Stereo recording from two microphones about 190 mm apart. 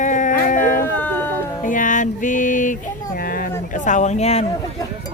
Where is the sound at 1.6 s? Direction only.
45° left (ahead or behind).